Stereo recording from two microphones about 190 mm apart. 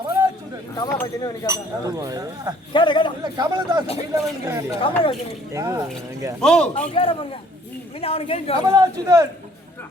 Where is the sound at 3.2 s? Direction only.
20° right (ahead or behind).